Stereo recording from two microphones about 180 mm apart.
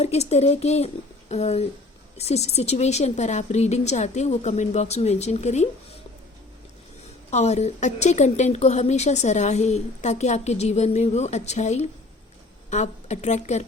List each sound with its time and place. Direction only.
0.0 s a woman's voice: 35° left (ahead or behind)
7.3 s a woman's voice: 40° left (ahead or behind)